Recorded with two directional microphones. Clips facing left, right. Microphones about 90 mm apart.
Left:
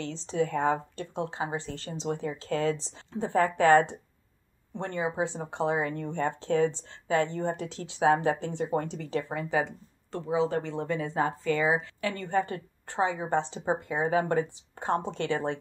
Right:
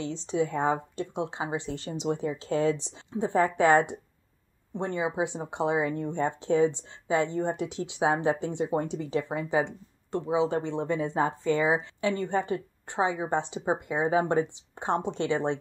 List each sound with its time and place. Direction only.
0.0 s a woman's voice: 15° right (ahead or behind)